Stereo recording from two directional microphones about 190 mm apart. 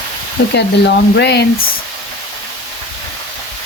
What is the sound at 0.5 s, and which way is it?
Speech, 65° left (ahead or behind).